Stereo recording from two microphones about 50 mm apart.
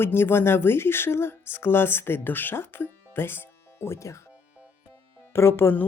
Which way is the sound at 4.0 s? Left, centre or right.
Left.